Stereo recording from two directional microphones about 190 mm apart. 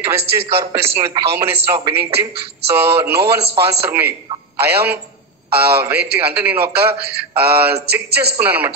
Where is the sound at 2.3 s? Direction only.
60° right (ahead or behind).